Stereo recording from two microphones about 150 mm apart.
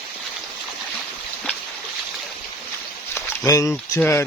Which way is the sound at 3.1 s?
20° left (ahead or behind).